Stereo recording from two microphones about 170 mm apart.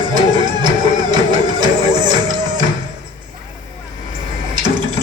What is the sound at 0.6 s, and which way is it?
Music, 25° right (ahead or behind).